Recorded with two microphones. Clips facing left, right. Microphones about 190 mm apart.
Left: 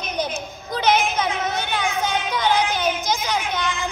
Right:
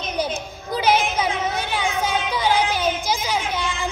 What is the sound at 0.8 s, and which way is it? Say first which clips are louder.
Music: even; 10° right (ahead or behind).